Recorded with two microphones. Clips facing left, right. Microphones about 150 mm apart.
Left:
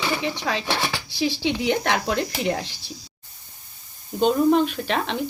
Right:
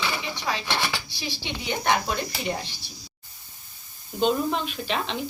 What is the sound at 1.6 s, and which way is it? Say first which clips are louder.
Speech: even; 90° left.